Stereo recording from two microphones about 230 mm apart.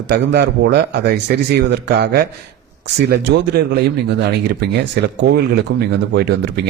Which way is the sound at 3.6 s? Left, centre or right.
Right.